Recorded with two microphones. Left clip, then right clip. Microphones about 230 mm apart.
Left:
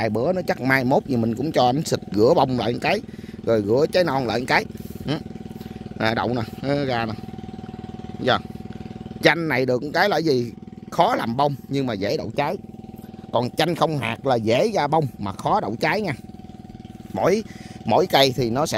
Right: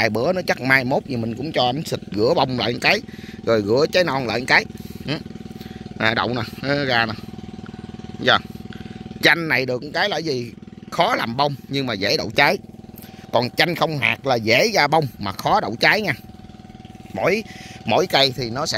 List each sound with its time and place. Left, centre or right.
0.0 s speech: centre
8.2 s speech: centre
9.5 s speech: left
10.9 s speech: centre
12.2 s speech: centre
13.6 s speech: centre
17.1 s speech: centre
18.2 s speech: left